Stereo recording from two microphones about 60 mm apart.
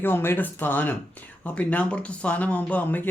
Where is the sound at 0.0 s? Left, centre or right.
Left.